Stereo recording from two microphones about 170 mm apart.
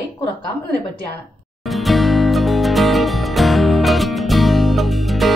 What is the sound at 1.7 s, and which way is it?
Music, centre (ahead or behind).